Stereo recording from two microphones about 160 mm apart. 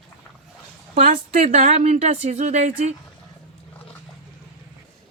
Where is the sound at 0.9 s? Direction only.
55° right (ahead or behind).